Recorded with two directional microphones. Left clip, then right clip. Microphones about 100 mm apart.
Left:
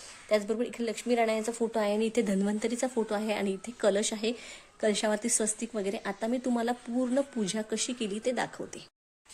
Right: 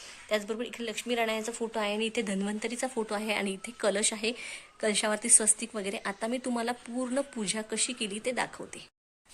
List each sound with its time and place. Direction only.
0.3 s a woman's voice: 45° left (ahead or behind)
3.1 s a woman's voice: 20° left (ahead or behind)